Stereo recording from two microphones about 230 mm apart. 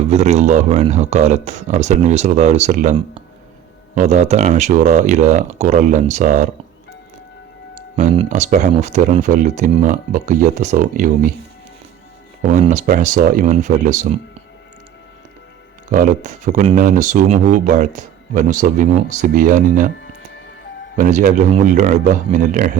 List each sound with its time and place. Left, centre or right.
0.0 s speech: right
3.9 s speech: right
7.9 s speech: right
12.5 s speech: right
15.9 s speech: right
20.9 s speech: right